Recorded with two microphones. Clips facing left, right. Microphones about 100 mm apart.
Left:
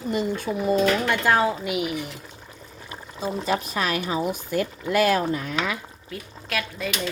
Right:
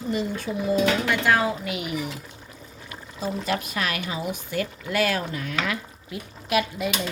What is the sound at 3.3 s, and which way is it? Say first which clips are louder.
Dishes: left 2 dB; 25° left (ahead or behind).